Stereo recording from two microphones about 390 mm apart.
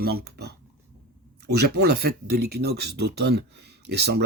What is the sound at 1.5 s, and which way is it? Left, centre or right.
Speech, right.